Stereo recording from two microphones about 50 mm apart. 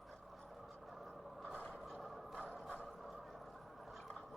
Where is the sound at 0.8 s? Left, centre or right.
Centre.